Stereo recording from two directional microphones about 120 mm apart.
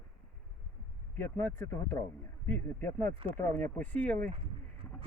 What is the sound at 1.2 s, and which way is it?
Speech, 20° left (ahead or behind).